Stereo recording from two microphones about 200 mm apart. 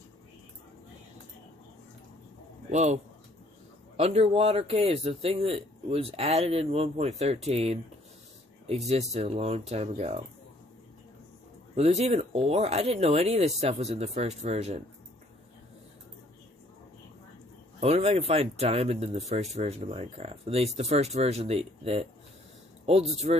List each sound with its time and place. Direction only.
2.7 s speech: 35° right (ahead or behind)
11.7 s speech: 30° right (ahead or behind)
17.7 s speech: 30° right (ahead or behind)